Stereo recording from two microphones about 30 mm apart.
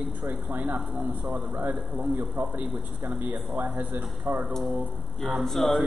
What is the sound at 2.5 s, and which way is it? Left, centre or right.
Speech, right.